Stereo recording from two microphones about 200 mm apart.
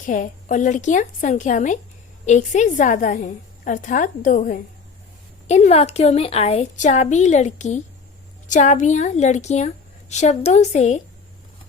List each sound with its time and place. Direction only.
0.0 s a woman's voice: 40° left (ahead or behind)